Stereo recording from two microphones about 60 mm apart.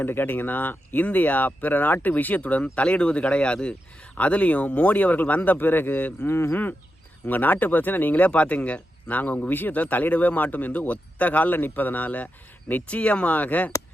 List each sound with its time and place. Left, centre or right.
0.0 s speech: left
6.2 s speech: left